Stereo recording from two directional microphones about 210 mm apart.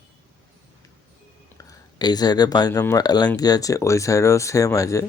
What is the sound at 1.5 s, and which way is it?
Speech, 20° left (ahead or behind).